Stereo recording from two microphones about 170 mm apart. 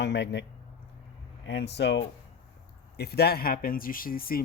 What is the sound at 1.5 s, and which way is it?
Speech, 85° left.